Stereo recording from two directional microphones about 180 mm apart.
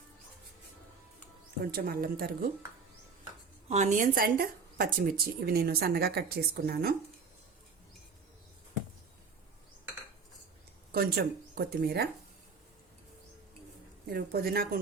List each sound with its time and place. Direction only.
1.7 s speech: 60° right (ahead or behind)
3.7 s speech: 40° right (ahead or behind); by 6.9 s 60° right (ahead or behind)
10.9 s speech: 60° right (ahead or behind)
14.1 s speech: 60° right (ahead or behind)